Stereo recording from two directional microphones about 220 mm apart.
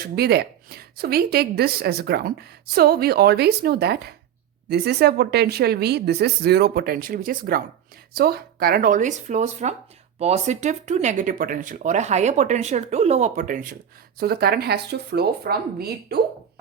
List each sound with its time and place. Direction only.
0.0 s a woman's voice: 45° right (ahead or behind)